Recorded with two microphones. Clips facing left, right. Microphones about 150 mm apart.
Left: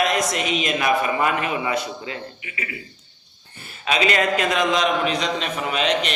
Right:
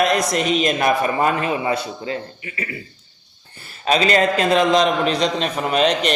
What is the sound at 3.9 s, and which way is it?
A man's voice, 35° right (ahead or behind).